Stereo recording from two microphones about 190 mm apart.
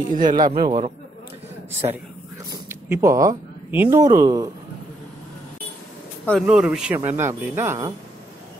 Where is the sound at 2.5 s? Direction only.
15° right (ahead or behind).